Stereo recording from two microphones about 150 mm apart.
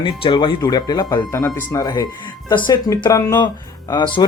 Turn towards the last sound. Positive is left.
turn(degrees=30)  # may be behind; listen again after turning